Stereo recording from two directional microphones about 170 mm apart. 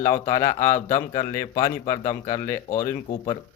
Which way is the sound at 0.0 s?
20° left (ahead or behind).